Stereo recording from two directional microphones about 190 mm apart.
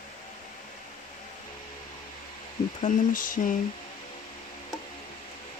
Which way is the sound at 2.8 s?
40° left (ahead or behind).